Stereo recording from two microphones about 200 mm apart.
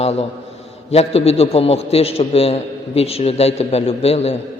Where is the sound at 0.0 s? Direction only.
30° left (ahead or behind).